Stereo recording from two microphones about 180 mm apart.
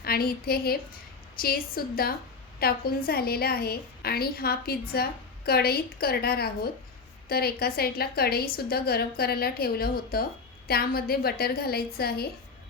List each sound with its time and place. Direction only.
0.0 s a woman's voice: 55° left (ahead or behind)